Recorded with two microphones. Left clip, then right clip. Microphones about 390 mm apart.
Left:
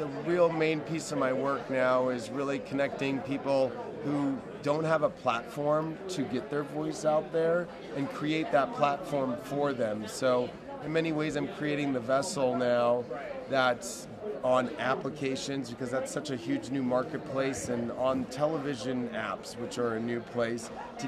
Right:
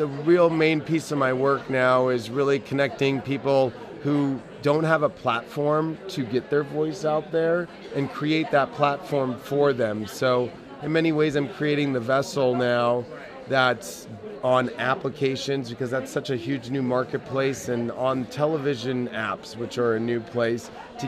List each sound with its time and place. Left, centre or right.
0.3 s a man's voice: right